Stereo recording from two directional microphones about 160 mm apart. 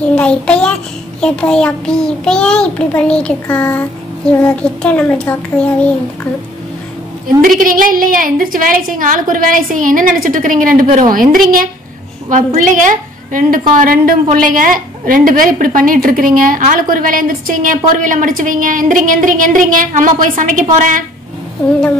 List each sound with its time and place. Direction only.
0.1 s a child's voice: 5° left (ahead or behind)
7.4 s a woman's voice: 60° right (ahead or behind)
12.3 s a woman's voice: 55° right (ahead or behind)